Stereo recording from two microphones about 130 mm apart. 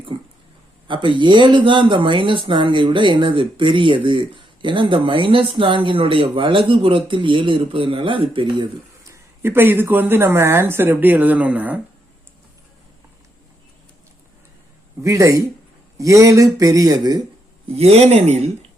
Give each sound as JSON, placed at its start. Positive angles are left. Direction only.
{"t": 0.1, "sound": "speech", "side_deg": -45}
{"t": 9.0, "sound": "a woman's voice", "side_deg": -20}
{"t": 15.0, "sound": "speech", "side_deg": -25}
{"t": 17.7, "sound": "speech", "side_deg": -50}